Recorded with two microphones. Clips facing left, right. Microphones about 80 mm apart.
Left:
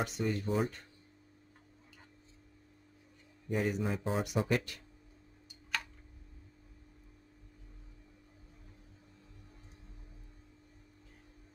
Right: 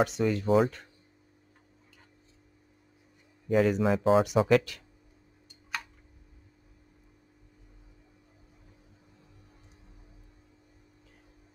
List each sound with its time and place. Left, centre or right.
0.0 s speech: right
3.4 s speech: right